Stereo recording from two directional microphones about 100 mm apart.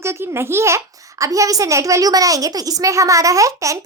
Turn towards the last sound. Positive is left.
turn(degrees=-30)  # may be behind; listen again after turning